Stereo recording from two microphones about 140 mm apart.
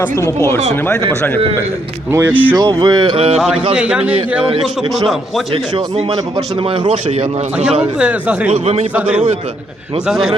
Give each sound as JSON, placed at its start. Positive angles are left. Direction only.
{"t": 0.0, "sound": "speech", "side_deg": 20}
{"t": 2.1, "sound": "a man's voice", "side_deg": -10}
{"t": 2.6, "sound": "speech", "side_deg": -35}
{"t": 3.8, "sound": "a man's voice", "side_deg": -10}
{"t": 6.8, "sound": "speech", "side_deg": -40}
{"t": 7.9, "sound": "a man's voice", "side_deg": -10}
{"t": 8.5, "sound": "speech", "side_deg": -45}
{"t": 9.0, "sound": "a man's voice", "side_deg": -10}